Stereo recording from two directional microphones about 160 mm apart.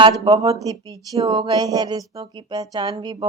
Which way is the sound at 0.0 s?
25° right (ahead or behind).